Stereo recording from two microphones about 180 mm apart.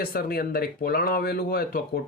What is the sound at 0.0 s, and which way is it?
Speech, 55° left (ahead or behind).